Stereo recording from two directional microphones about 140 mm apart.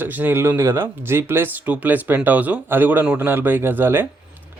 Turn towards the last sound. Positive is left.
turn(degrees=-15)  # may be behind; listen again after turning